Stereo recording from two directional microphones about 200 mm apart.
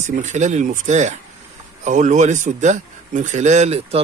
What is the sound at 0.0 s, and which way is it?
Speech, 35° right (ahead or behind).